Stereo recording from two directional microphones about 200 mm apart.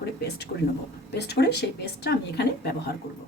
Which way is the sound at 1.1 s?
55° left (ahead or behind).